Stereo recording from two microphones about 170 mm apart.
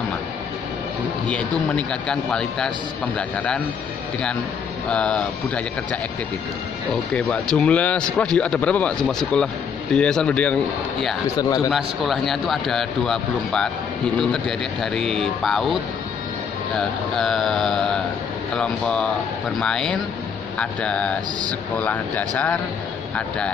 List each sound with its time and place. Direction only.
1.2 s speech: 5° left (ahead or behind)
4.8 s speech: 5° left (ahead or behind)
7.2 s speech: 5° left (ahead or behind)
11.3 s speech: 20° left (ahead or behind)
11.7 s speech: centre (ahead or behind)